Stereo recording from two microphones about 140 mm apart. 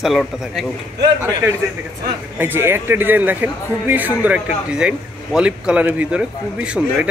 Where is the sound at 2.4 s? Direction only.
15° right (ahead or behind).